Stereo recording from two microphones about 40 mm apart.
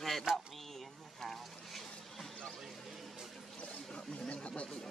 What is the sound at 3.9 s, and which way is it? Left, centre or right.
Chatter, left.